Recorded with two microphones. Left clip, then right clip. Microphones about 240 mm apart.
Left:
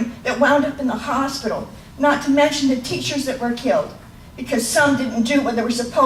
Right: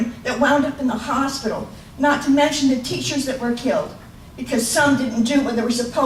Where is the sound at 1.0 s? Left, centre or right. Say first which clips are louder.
Left 1 dB; centre.